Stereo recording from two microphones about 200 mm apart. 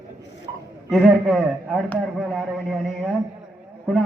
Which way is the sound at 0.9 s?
Centre (ahead or behind).